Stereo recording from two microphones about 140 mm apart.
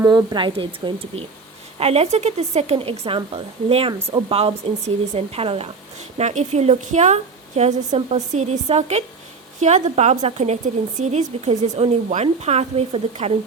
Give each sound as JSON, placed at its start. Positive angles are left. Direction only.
{"t": 0.1, "sound": "a woman's voice", "side_deg": -30}